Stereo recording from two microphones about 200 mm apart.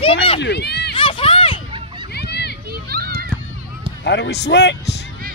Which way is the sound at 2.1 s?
55° left (ahead or behind).